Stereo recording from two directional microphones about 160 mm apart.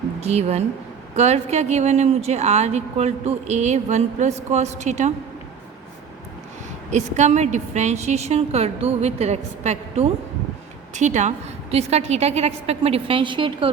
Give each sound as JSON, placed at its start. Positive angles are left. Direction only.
{"t": 0.2, "sound": "speech", "side_deg": -40}
{"t": 6.9, "sound": "a woman's voice", "side_deg": -45}